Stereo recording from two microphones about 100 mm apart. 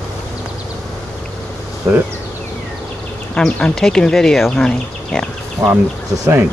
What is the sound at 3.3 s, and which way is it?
Speech, 5° left (ahead or behind).